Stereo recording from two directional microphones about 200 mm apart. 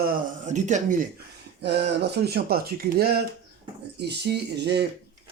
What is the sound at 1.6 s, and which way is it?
Speech, 55° right (ahead or behind).